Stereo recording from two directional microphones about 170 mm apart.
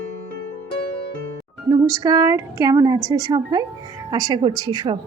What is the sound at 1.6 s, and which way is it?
A woman's voice, 20° right (ahead or behind).